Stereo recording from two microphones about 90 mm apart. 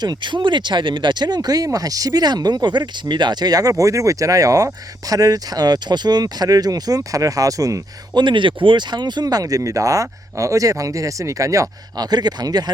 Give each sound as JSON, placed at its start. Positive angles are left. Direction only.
{"t": 0.0, "sound": "speech", "side_deg": -55}
{"t": 8.2, "sound": "speech", "side_deg": -65}